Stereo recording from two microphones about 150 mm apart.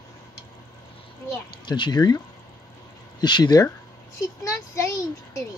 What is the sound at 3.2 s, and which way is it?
Speech, 30° left (ahead or behind).